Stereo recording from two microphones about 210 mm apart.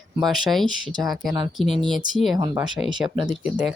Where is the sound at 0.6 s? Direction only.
20° right (ahead or behind).